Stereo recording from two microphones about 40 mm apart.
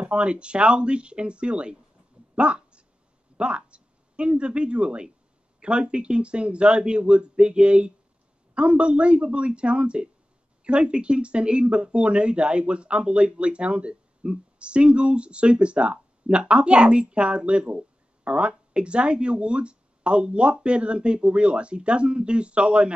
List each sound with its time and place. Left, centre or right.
0.1 s speech: right
2.3 s a sound: right
3.3 s speech: right